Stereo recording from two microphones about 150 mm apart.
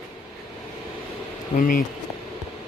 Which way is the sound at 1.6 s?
65° left (ahead or behind).